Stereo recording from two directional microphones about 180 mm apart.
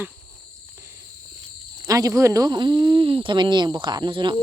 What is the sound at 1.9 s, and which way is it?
Speech, 20° right (ahead or behind).